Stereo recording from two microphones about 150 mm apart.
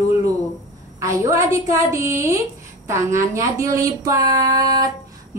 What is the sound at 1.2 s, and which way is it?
A woman's voice, 20° right (ahead or behind).